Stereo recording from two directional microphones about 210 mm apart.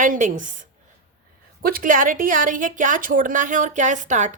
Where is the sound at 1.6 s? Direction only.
40° right (ahead or behind).